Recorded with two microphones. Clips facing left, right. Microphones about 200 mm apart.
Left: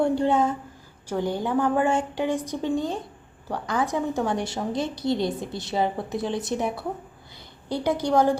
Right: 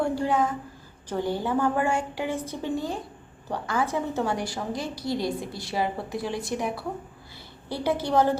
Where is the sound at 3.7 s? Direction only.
15° left (ahead or behind).